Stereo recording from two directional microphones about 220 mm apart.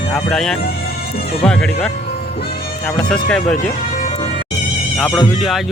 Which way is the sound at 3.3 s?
5° left (ahead or behind).